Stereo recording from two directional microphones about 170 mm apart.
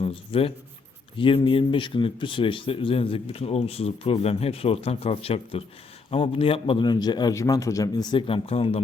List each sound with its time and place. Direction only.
0.0 s a man's voice: 30° left (ahead or behind)